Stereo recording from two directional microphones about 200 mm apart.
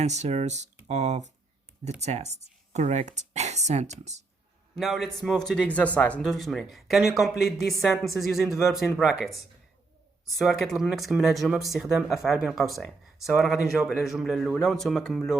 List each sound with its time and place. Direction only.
0.0 s speech: 35° right (ahead or behind)
4.8 s speech: centre (ahead or behind)